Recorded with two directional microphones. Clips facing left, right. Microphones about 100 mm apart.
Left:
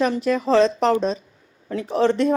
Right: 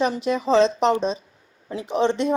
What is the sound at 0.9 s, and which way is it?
Speech, 25° right (ahead or behind).